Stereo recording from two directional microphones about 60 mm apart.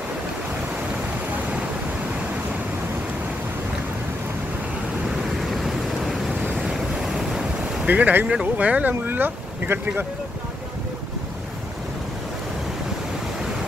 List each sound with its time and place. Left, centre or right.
5.5 s vehicle: centre
6.6 s waves: centre
7.8 s speech: right